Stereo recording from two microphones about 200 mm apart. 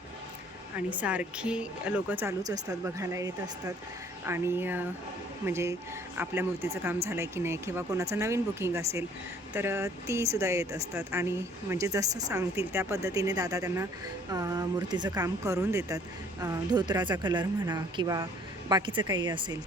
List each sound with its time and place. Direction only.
0.8 s a woman's voice: 5° right (ahead or behind); by 19.5 s 20° right (ahead or behind)